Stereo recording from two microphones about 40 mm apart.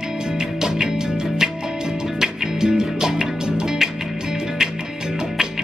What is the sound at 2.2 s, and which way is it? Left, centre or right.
Music, centre.